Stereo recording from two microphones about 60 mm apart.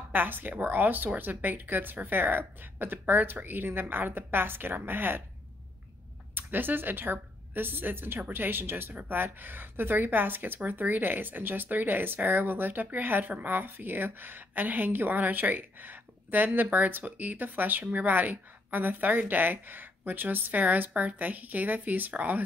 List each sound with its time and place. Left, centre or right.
0.1 s a woman's voice: right
6.3 s a woman's voice: right